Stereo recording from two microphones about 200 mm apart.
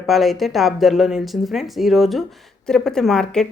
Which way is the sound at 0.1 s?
Centre (ahead or behind).